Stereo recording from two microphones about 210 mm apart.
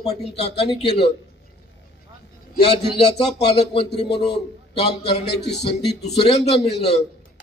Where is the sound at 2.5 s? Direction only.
50° left (ahead or behind).